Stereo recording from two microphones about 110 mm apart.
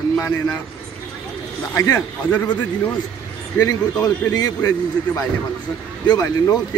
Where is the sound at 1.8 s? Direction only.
30° left (ahead or behind).